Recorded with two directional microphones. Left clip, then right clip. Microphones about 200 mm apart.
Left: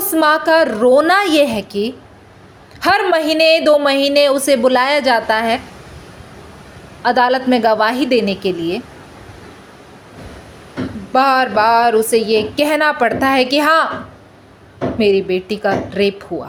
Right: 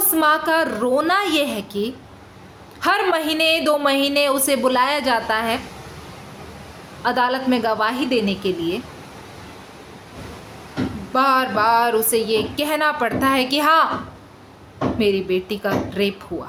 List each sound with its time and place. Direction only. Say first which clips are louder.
0.0 s a woman's voice: left 4 dB; 20° left (ahead or behind)
7.0 s a woman's voice: left 6 dB; 20° left (ahead or behind)
11.1 s a woman's voice: left 5 dB; 20° left (ahead or behind)
14.9 s a woman's voice: left 6 dB; 20° left (ahead or behind)